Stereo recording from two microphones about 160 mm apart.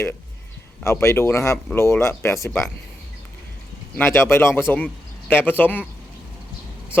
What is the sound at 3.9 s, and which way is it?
A man's voice, 15° left (ahead or behind).